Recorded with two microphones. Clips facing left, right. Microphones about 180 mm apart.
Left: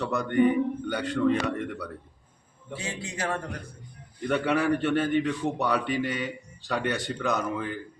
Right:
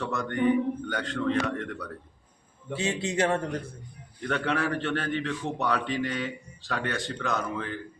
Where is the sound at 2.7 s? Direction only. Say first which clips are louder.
Right 6 dB; 25° right (ahead or behind).